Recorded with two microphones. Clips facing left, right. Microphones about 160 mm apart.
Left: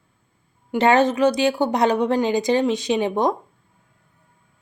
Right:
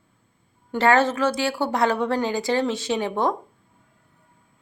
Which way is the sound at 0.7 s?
20° left (ahead or behind).